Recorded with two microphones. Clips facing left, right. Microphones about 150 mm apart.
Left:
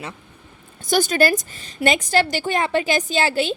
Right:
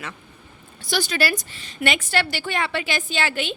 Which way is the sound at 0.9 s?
45° left (ahead or behind).